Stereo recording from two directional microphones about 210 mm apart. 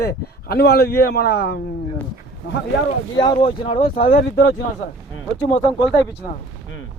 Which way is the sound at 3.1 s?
20° left (ahead or behind).